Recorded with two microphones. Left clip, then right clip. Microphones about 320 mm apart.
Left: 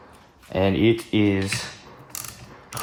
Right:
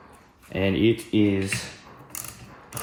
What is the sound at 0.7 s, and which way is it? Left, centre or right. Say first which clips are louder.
Speech: even; centre.